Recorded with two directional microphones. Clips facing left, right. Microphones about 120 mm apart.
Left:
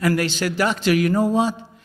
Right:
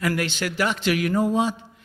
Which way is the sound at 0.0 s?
35° left (ahead or behind).